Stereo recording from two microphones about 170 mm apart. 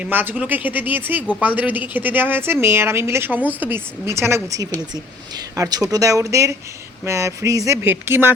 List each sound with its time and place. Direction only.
0.0 s a woman's voice: 10° right (ahead or behind)